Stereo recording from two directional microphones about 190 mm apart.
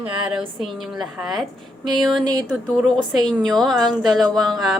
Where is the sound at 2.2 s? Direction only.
20° right (ahead or behind).